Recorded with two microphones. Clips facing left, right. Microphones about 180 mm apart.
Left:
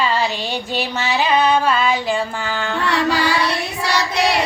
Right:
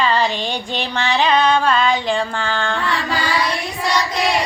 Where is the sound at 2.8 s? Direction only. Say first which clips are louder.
Left 4 dB; 70° left (ahead or behind).